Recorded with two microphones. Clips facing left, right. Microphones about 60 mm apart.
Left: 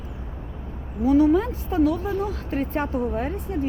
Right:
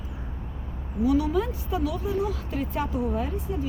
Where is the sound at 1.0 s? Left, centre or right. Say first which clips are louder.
Left 6 dB; left.